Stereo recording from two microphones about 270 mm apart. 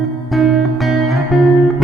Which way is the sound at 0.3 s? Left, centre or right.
Centre.